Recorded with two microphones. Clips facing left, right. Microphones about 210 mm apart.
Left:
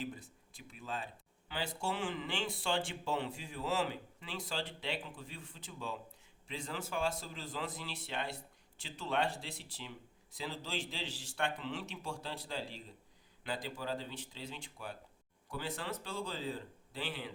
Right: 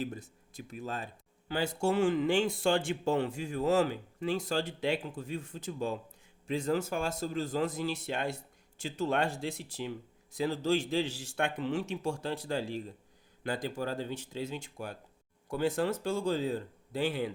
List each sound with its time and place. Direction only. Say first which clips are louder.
0.2 s speech: right 8 dB; 45° right (ahead or behind)